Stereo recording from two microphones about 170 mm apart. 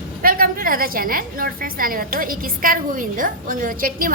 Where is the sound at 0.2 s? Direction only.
55° right (ahead or behind).